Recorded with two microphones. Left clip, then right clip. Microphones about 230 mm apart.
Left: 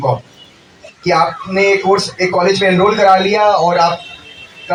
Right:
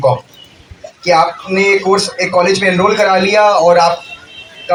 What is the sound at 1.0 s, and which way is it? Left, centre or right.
Speech, right.